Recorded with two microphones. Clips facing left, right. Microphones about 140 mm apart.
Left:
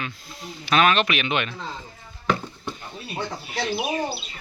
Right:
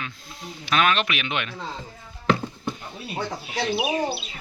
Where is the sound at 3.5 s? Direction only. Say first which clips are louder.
Right 2 dB; 10° right (ahead or behind).